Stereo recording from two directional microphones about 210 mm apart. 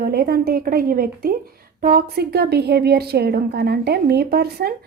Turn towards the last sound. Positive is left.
turn(degrees=-50)  # may be behind; listen again after turning